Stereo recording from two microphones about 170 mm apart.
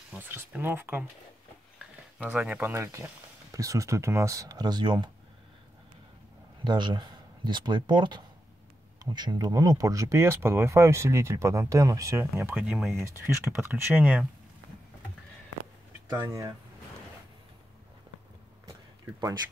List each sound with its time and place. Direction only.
0.1 s speech: 10° right (ahead or behind)
2.1 s speech: 10° right (ahead or behind); by 5.1 s 25° right (ahead or behind)
6.6 s speech: 25° right (ahead or behind)
12.5 s speech: centre (ahead or behind)
13.0 s speech: 15° right (ahead or behind)
16.3 s speech: 20° right (ahead or behind)